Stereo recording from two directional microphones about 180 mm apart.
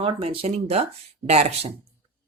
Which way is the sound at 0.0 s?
30° right (ahead or behind).